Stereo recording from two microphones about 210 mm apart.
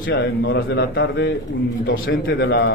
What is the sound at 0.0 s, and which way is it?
A man's voice, 55° left (ahead or behind).